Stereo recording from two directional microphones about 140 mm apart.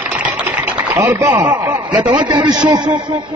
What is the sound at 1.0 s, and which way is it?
A man's voice, 10° right (ahead or behind).